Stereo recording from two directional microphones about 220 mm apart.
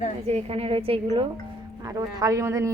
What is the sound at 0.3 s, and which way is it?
A woman's voice, 30° right (ahead or behind).